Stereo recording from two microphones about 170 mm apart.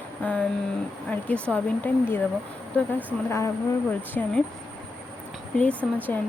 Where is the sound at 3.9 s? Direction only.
10° left (ahead or behind).